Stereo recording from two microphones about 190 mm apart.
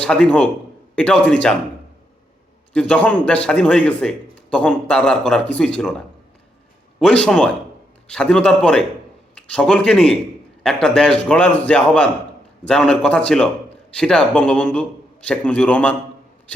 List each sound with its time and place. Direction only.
0.0 s speech: 5° left (ahead or behind)
2.7 s speech: 5° left (ahead or behind)
7.0 s a man's voice: 5° left (ahead or behind)